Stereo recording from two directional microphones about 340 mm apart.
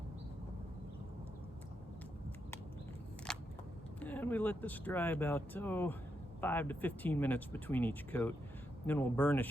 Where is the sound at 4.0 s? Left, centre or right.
Centre.